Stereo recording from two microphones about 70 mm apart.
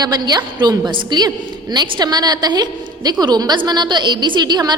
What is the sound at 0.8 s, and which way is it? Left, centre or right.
A woman's voice, right.